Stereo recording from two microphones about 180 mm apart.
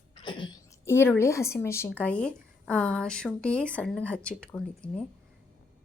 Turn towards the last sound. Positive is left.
turn(degrees=5)  # may be behind; listen again after turning